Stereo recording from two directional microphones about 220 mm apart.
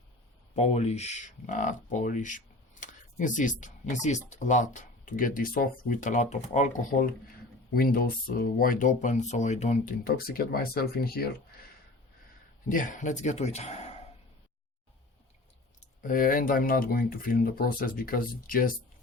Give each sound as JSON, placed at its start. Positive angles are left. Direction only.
{"t": 0.5, "sound": "speech", "side_deg": 30}
{"t": 15.8, "sound": "speech", "side_deg": 40}